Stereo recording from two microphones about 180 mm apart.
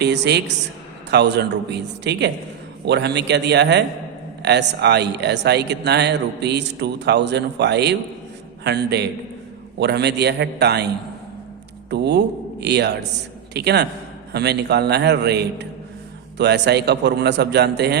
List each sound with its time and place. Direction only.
0.0 s a man's voice: 70° right (ahead or behind)